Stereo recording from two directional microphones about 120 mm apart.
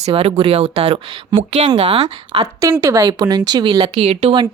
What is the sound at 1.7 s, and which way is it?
Speech, 60° right (ahead or behind).